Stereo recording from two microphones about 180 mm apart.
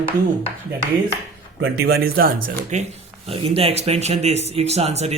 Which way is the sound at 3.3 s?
35° right (ahead or behind).